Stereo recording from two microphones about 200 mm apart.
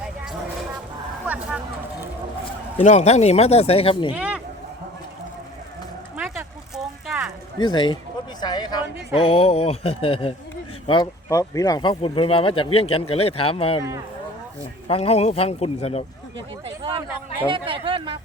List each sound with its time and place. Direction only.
1.2 s speech: 5° right (ahead or behind)
2.8 s speech: 35° left (ahead or behind)
4.1 s speech: 5° right (ahead or behind)
7.1 s a sound: 5° right (ahead or behind)
7.6 s speech: 25° left (ahead or behind)
8.4 s a sound: 20° left (ahead or behind)
9.1 s speech: 30° left (ahead or behind)
14.8 s speech: 30° left (ahead or behind)
16.6 s speech: 25° right (ahead or behind)